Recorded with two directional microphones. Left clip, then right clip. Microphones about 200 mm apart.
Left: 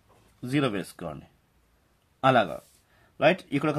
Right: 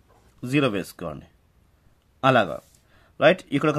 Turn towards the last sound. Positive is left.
turn(degrees=-30)  # may be behind; listen again after turning